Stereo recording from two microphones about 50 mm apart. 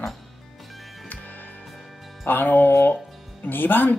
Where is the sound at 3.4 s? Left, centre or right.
Left.